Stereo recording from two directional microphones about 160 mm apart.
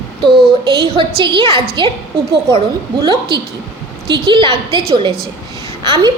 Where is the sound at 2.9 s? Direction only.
30° right (ahead or behind).